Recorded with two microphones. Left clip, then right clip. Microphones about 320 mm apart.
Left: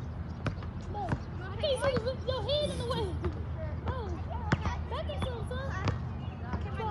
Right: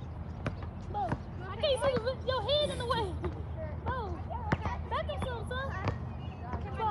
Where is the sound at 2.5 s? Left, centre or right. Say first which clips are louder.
Right 2 dB; centre.